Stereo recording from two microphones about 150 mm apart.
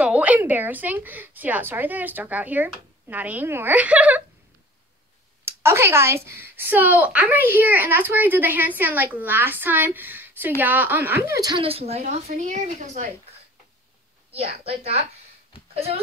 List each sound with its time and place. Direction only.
0.0 s a woman's voice: 10° right (ahead or behind)
5.4 s a woman's voice: 15° right (ahead or behind)
11.6 s a woman's voice: 40° right (ahead or behind)
14.3 s a woman's voice: 45° right (ahead or behind)